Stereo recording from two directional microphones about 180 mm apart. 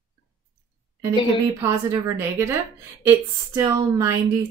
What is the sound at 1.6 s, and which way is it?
Speech, 15° right (ahead or behind).